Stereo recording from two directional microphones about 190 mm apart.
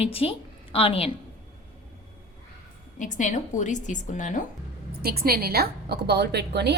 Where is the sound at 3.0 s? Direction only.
40° left (ahead or behind).